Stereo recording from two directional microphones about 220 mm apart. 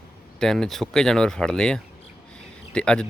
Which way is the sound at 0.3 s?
Centre (ahead or behind).